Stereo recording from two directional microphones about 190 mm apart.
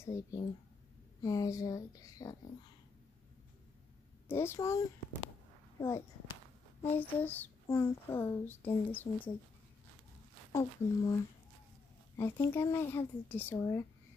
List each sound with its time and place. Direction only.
0.0 s a child's voice: 15° left (ahead or behind)
4.3 s a child's voice: 15° left (ahead or behind)
10.5 s speech: 20° left (ahead or behind)
12.2 s a child's voice: 15° left (ahead or behind)